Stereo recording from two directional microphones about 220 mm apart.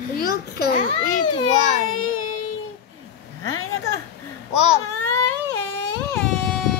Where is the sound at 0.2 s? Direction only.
45° left (ahead or behind).